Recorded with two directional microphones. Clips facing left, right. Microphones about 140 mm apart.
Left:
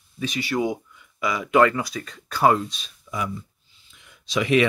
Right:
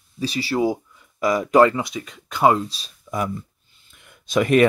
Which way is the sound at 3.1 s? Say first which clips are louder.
Right 4 dB; 50° right (ahead or behind).